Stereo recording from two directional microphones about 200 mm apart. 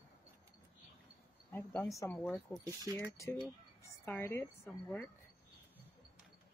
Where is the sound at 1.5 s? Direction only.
5° left (ahead or behind).